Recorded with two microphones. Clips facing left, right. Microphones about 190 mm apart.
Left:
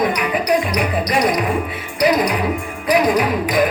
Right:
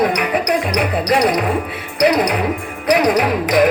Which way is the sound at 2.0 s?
70° right (ahead or behind).